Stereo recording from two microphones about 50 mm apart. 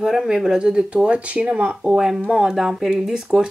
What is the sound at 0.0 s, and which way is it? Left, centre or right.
Speech, centre.